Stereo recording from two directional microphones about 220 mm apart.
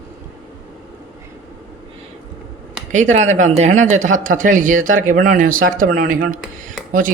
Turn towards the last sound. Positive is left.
turn(degrees=-40)  # may be behind; listen again after turning